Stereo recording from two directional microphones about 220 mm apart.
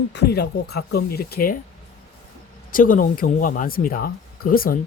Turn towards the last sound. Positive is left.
turn(degrees=40)  # may be behind; listen again after turning